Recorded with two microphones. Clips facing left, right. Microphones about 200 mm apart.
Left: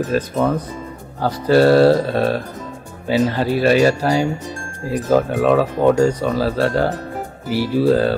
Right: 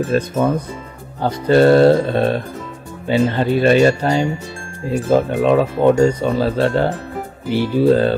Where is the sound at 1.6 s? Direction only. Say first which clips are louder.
Right 1 dB; 25° right (ahead or behind).